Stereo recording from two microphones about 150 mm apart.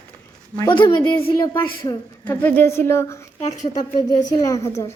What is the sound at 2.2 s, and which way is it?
Speech, 15° left (ahead or behind).